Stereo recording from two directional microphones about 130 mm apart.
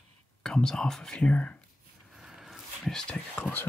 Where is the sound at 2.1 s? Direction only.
5° right (ahead or behind).